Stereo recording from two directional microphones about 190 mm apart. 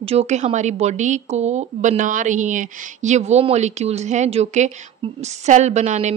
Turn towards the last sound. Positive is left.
turn(degrees=-35)  # may be behind; listen again after turning